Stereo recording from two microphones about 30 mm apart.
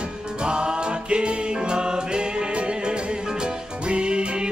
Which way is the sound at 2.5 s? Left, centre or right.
Right.